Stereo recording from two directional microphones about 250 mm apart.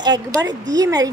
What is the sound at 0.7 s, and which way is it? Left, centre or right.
Speech, centre.